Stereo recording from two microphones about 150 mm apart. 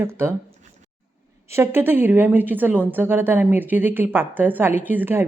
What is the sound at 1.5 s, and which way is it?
Speech, 15° right (ahead or behind).